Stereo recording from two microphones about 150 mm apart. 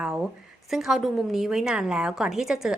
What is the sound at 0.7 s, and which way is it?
A woman's voice, centre (ahead or behind).